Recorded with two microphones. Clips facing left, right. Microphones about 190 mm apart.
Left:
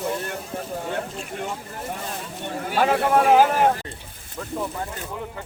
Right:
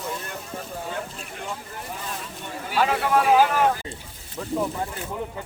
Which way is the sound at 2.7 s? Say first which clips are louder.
Left 2 dB; 50° left (ahead or behind).